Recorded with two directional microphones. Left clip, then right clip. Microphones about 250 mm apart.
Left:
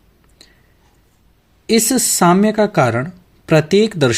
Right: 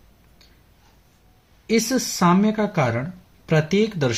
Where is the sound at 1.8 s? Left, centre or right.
Left.